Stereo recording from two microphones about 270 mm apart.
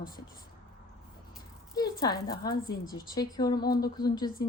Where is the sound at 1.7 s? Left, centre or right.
Centre.